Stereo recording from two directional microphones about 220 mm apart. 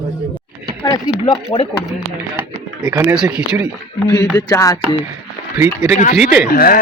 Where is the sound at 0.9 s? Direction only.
25° left (ahead or behind).